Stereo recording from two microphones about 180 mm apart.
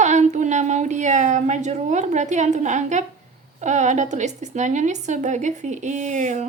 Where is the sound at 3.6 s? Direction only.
40° right (ahead or behind).